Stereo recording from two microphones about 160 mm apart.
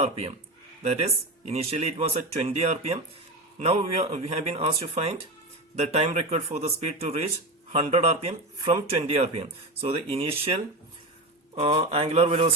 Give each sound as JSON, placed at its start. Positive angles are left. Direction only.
{"t": 0.0, "sound": "speech", "side_deg": -40}
{"t": 11.5, "sound": "speech", "side_deg": -35}